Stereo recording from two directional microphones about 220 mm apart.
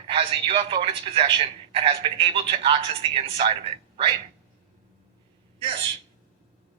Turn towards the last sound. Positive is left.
turn(degrees=-25)  # may be behind; listen again after turning